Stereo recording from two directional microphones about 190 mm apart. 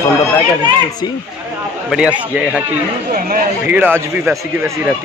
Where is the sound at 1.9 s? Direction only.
5° right (ahead or behind).